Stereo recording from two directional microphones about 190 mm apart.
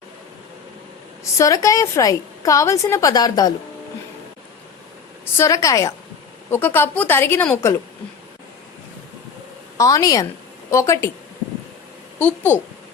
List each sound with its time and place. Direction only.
1.2 s a woman's voice: 15° left (ahead or behind)
5.4 s a woman's voice: 15° left (ahead or behind)
9.7 s a woman's voice: 20° left (ahead or behind)
12.2 s a woman's voice: 10° left (ahead or behind)